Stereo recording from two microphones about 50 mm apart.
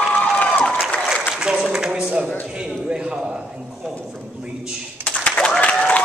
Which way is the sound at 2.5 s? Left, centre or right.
Centre.